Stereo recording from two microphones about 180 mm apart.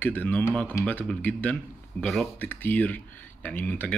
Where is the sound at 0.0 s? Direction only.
10° left (ahead or behind).